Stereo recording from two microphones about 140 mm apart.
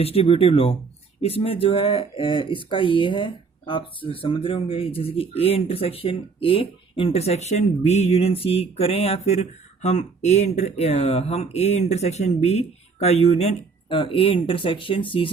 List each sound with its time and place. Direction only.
0.0 s speech: 45° left (ahead or behind)
13.9 s speech: 40° left (ahead or behind)